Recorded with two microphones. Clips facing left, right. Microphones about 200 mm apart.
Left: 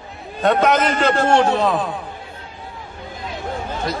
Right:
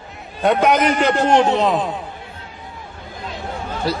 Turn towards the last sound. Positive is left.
turn(degrees=-30)  # may be behind; listen again after turning